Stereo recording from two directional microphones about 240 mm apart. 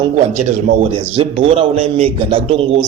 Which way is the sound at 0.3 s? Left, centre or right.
Right.